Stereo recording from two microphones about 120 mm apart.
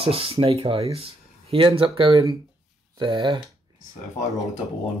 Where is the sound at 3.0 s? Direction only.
40° right (ahead or behind).